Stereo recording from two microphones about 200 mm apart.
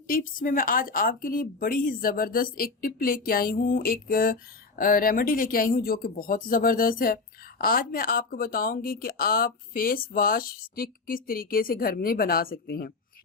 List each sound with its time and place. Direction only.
0.1 s speech: 45° left (ahead or behind)